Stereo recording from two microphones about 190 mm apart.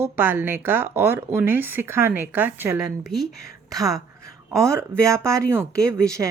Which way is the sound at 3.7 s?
20° right (ahead or behind).